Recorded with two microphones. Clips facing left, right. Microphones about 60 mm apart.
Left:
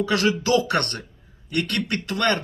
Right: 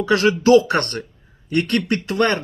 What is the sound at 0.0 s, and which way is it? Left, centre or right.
Speech, right.